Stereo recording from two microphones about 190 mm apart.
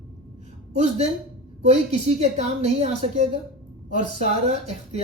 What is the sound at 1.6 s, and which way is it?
A woman's voice, 35° right (ahead or behind).